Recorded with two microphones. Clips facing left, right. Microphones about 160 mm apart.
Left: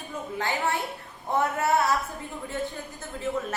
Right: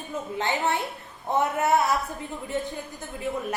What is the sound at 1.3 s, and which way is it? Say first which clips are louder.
Speech: right 2 dB; 20° right (ahead or behind).